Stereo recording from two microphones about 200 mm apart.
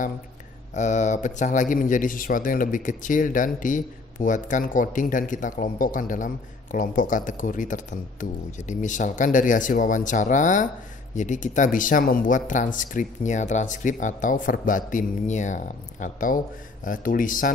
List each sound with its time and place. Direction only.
0.7 s a man's voice: 35° left (ahead or behind)